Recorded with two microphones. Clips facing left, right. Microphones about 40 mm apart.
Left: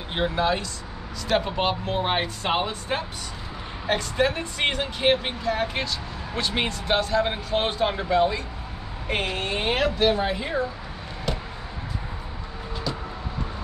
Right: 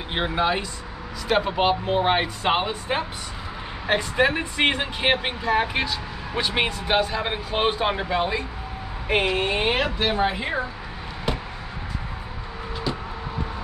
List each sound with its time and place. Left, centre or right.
0.1 s speech: centre